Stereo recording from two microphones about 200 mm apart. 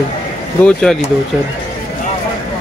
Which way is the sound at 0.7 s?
5° left (ahead or behind).